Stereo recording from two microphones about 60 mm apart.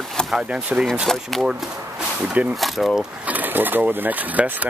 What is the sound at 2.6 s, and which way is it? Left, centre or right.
Speech, centre.